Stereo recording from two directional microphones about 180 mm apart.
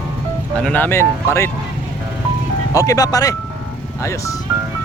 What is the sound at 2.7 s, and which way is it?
Speech, 20° left (ahead or behind).